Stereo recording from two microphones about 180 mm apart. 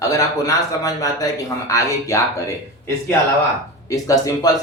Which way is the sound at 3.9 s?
20° left (ahead or behind).